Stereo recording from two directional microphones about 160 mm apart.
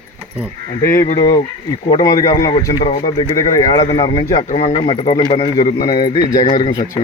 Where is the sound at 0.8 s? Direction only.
20° left (ahead or behind).